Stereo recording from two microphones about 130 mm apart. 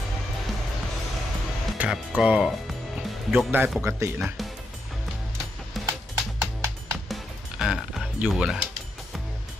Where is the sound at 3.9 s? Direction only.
20° right (ahead or behind).